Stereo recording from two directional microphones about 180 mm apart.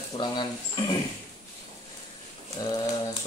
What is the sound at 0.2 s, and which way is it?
Speech, 25° left (ahead or behind).